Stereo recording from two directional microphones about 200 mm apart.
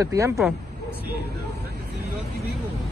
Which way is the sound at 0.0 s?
15° right (ahead or behind).